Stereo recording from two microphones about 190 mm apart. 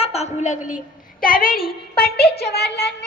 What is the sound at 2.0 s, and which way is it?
Child singing, 55° left (ahead or behind).